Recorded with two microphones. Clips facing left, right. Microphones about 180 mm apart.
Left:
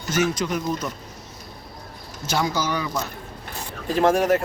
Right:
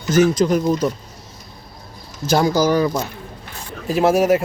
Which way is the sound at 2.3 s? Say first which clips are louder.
Right 8 dB; 35° right (ahead or behind).